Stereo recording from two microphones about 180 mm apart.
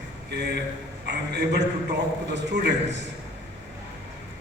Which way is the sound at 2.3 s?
70° right (ahead or behind).